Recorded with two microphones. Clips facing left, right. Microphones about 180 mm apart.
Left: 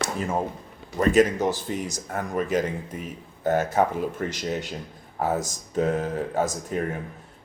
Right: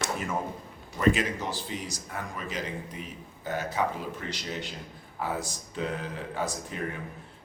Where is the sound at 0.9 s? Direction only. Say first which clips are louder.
Left 6 dB; 45° left (ahead or behind).